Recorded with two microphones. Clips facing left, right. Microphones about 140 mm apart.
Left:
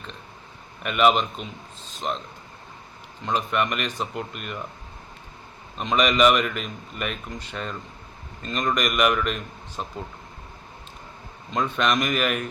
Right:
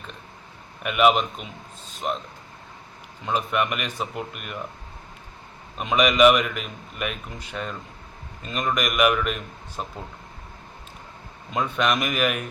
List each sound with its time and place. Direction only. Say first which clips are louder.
0.8 s speech: right 1 dB; 5° right (ahead or behind)
3.2 s speech: even; 5° right (ahead or behind)
5.7 s speech: right 1 dB; 10° right (ahead or behind)
11.5 s speech: even; 5° right (ahead or behind)